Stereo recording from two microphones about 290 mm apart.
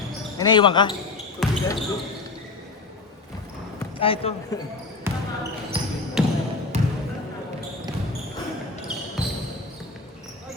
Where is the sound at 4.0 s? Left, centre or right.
Centre.